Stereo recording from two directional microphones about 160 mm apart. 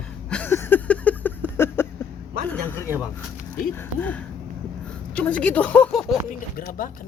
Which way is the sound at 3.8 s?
10° left (ahead or behind).